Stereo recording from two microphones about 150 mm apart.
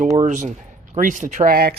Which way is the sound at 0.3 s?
55° right (ahead or behind).